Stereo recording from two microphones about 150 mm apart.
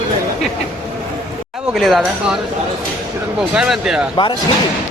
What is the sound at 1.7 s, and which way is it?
Speech, centre (ahead or behind).